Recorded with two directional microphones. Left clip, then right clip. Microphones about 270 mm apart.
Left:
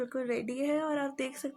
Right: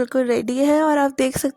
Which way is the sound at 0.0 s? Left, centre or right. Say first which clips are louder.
Right 14 dB; right.